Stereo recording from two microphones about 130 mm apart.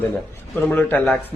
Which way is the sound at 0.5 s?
15° left (ahead or behind).